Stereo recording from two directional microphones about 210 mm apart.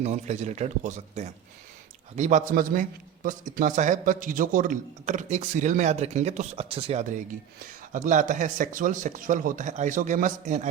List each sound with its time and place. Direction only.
0.0 s a man's voice: 30° right (ahead or behind)